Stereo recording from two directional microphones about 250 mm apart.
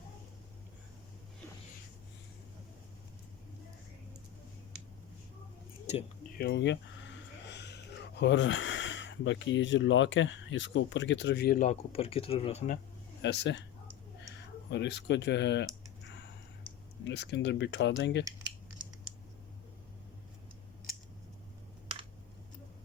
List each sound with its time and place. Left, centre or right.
5.8 s a sound: left
6.3 s speech: left
13.2 s speech: left
17.0 s speech: left